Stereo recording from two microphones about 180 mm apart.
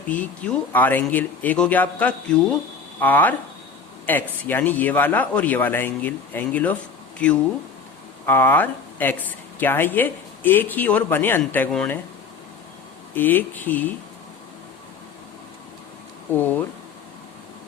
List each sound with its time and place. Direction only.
0.1 s speech: 5° left (ahead or behind)
13.1 s speech: 10° left (ahead or behind)
16.4 s speech: 10° left (ahead or behind)